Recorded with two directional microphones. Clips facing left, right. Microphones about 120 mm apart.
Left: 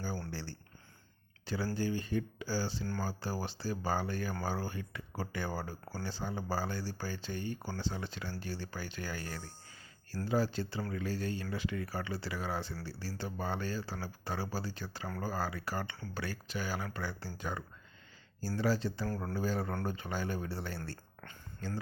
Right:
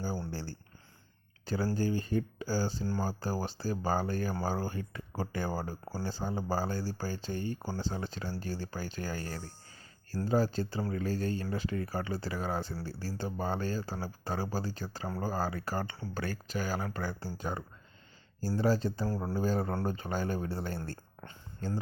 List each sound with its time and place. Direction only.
0.0 s a sound: 35° right (ahead or behind)
1.5 s speech: 40° right (ahead or behind)
10.8 s speech: 30° right (ahead or behind)
11.0 s speech: 40° right (ahead or behind)
19.0 s speech: 30° right (ahead or behind)
19.9 s speech: 40° right (ahead or behind)